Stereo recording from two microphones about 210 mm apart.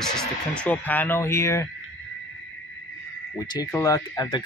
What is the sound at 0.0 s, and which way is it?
Speech, 5° left (ahead or behind).